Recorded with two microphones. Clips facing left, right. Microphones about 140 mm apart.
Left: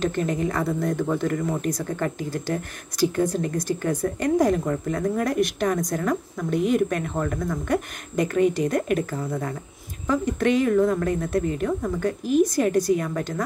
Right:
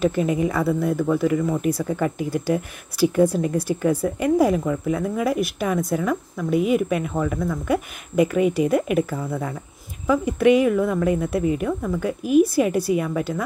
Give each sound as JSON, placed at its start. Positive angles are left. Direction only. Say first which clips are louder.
{"t": 0.0, "sound": "speech", "louder": "right 4 dB", "side_deg": -10}